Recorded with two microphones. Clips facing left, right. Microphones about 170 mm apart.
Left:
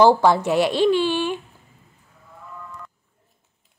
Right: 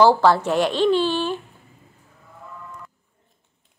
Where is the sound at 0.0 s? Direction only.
15° left (ahead or behind).